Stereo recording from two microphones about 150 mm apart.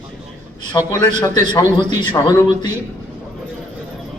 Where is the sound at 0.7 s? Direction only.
25° left (ahead or behind).